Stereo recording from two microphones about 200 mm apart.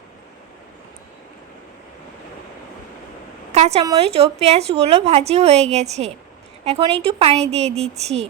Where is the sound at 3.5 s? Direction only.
35° right (ahead or behind).